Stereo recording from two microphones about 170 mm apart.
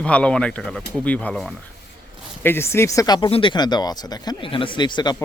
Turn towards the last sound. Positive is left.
turn(degrees=25)  # may be behind; listen again after turning